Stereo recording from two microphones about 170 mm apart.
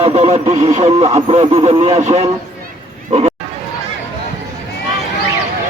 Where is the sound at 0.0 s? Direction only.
40° right (ahead or behind).